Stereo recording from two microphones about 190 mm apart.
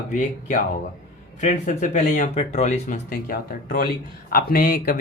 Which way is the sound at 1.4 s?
40° left (ahead or behind).